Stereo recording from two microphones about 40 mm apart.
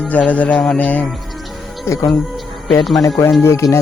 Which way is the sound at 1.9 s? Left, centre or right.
Left.